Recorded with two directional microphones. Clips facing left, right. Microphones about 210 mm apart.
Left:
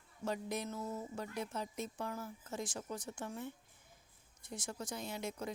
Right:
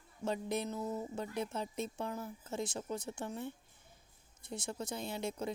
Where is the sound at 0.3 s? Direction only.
25° right (ahead or behind).